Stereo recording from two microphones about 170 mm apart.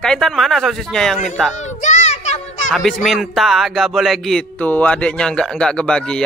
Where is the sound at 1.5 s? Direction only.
45° left (ahead or behind).